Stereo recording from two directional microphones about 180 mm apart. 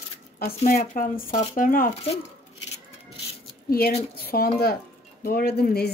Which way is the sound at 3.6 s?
55° left (ahead or behind).